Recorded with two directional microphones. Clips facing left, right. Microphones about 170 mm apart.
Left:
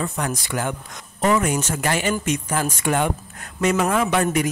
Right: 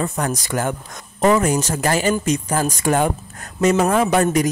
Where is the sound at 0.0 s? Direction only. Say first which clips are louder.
Right 3 dB; 40° right (ahead or behind).